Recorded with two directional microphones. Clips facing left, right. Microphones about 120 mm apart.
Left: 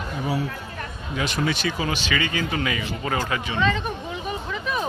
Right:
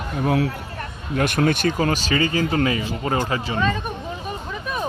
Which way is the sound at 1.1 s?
55° right (ahead or behind).